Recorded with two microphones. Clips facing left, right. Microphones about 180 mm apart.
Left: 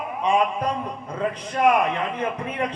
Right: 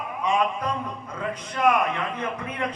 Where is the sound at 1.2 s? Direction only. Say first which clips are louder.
Left 4 dB; 30° left (ahead or behind).